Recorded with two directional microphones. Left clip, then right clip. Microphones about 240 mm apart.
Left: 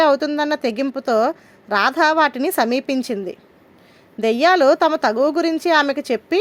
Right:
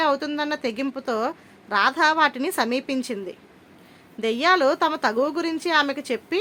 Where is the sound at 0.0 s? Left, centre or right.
Left.